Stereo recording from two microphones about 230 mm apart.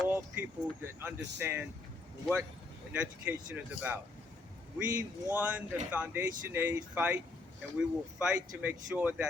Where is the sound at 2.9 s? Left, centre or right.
Centre.